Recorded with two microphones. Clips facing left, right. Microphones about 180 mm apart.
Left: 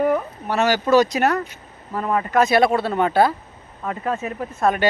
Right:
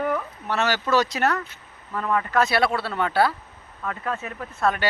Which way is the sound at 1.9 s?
30° left (ahead or behind).